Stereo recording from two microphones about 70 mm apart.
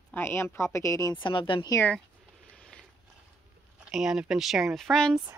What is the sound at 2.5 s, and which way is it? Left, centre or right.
Mechanisms, centre.